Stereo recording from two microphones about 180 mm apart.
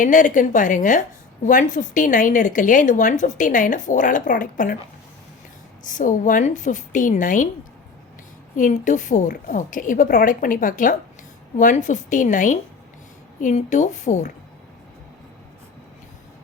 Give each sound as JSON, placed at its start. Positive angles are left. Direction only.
{"t": 0.0, "sound": "speech", "side_deg": 45}
{"t": 5.9, "sound": "speech", "side_deg": 45}
{"t": 8.5, "sound": "speech", "side_deg": 45}